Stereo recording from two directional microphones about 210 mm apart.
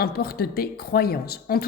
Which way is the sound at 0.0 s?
45° left (ahead or behind).